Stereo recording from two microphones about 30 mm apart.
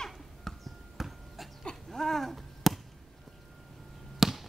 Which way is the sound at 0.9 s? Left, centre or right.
Centre.